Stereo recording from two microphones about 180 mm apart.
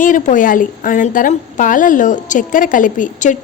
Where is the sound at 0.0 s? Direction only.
45° left (ahead or behind).